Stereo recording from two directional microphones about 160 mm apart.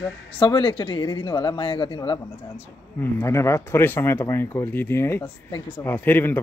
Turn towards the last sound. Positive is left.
turn(degrees=10)  # may be behind; listen again after turning